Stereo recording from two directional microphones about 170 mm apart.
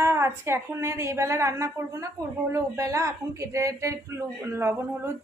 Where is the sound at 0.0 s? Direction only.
15° right (ahead or behind).